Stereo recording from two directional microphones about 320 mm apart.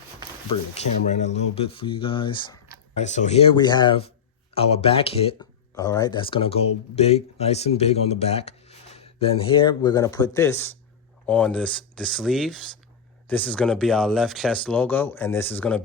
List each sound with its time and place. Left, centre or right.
1.0 s speech: left; by 15.8 s centre